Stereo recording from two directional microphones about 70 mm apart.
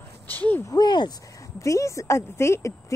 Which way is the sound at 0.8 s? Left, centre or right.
Left.